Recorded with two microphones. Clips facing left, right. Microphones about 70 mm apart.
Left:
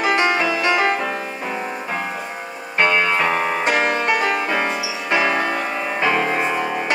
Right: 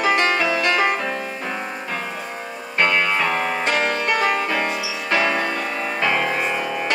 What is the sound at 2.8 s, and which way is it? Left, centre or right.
Music, centre.